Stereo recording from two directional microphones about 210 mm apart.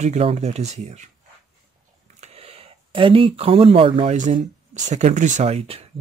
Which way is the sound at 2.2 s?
30° right (ahead or behind).